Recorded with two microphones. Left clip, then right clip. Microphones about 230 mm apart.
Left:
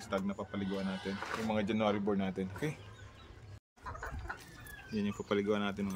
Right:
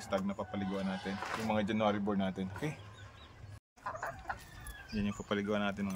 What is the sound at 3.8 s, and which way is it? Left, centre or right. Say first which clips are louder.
Chicken: right 4 dB; centre.